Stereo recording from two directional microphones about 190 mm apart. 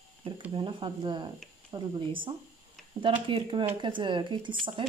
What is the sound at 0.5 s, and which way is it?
Speech, 25° right (ahead or behind).